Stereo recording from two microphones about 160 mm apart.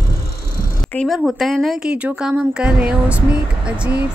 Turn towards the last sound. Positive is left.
turn(degrees=-5)  # may be behind; listen again after turning